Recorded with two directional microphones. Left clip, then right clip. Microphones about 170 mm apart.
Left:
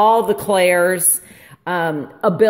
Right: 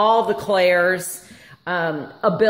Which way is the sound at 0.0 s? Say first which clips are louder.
Left 3 dB; 35° left (ahead or behind).